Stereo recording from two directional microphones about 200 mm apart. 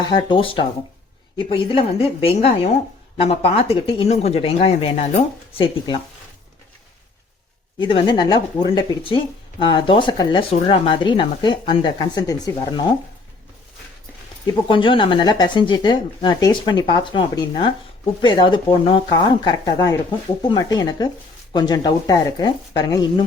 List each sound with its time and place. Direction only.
0.0 s speech: 25° left (ahead or behind)
7.8 s speech: 25° left (ahead or behind)
14.7 s speech: 25° left (ahead or behind)